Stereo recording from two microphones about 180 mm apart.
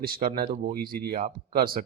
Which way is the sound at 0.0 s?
55° right (ahead or behind).